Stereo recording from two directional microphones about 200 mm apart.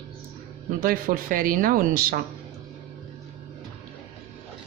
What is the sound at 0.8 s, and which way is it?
A woman's voice, 45° right (ahead or behind).